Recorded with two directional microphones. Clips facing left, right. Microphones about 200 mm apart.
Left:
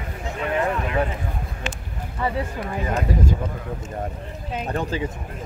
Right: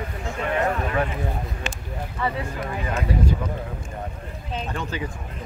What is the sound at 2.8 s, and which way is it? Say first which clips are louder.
Speech: left 2 dB; 40° left (ahead or behind).